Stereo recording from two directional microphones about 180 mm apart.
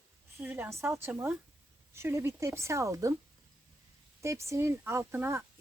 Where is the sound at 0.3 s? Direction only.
10° right (ahead or behind).